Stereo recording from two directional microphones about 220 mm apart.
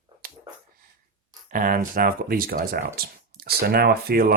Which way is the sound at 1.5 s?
40° right (ahead or behind).